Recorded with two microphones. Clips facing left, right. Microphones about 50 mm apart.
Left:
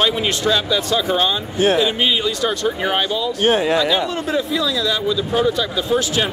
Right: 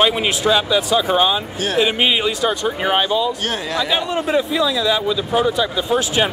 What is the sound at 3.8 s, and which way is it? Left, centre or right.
Speech, centre.